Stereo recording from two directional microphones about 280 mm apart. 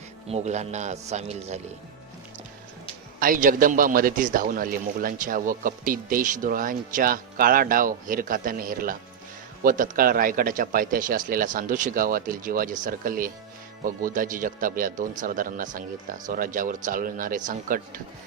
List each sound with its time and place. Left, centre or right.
0.3 s a man's voice: right
3.2 s a man's voice: right